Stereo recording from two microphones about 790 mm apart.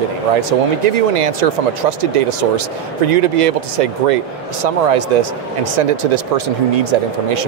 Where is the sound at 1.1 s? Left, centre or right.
Right.